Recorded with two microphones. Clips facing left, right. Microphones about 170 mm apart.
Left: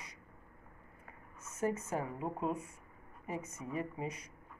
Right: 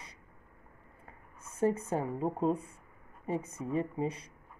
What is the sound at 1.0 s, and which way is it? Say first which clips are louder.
A woman's voice: right 1 dB; 30° right (ahead or behind).